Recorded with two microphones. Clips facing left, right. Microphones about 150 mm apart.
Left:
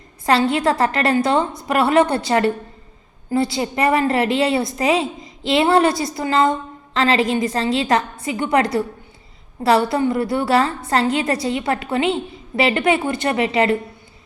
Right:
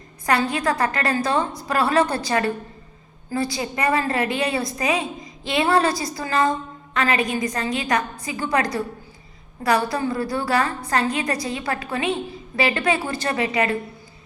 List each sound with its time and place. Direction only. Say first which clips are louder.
0.3 s a woman's voice: left 4 dB; 25° left (ahead or behind)